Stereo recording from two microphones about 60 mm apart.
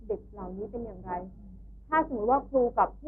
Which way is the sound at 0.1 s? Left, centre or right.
Left.